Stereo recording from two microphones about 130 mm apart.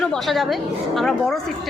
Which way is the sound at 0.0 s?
5° left (ahead or behind).